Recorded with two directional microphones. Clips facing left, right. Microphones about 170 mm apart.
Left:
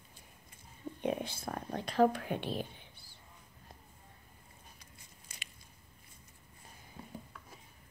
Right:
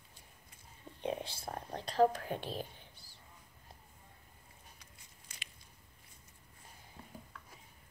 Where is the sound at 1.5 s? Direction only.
30° right (ahead or behind).